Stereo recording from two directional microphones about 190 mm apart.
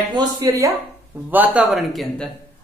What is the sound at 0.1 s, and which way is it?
Speech, 20° right (ahead or behind).